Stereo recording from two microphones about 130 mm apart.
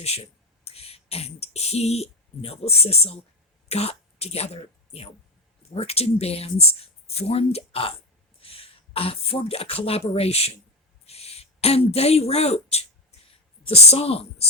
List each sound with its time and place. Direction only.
0.6 s a woman's voice: 50° left (ahead or behind)